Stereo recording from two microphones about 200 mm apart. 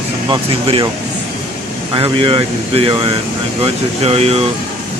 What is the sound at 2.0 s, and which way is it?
Speech, 25° right (ahead or behind).